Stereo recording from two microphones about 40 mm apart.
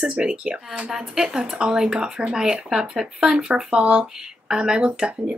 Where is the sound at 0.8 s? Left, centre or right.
Centre.